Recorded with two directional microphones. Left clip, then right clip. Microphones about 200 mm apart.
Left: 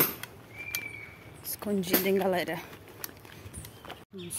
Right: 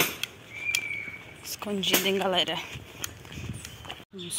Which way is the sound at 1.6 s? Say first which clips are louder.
Right 3 dB; 25° left (ahead or behind).